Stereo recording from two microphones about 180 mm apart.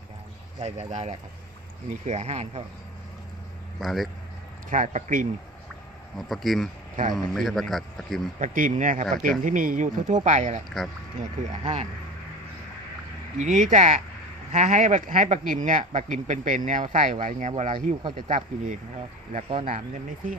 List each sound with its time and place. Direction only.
0.6 s speech: 40° right (ahead or behind)
3.8 s a man's voice: centre (ahead or behind)
4.6 s speech: 45° right (ahead or behind)
6.1 s a man's voice: centre (ahead or behind)
8.4 s speech: 45° right (ahead or behind)
11.6 s speech: 35° right (ahead or behind)
13.4 s speech: 40° right (ahead or behind)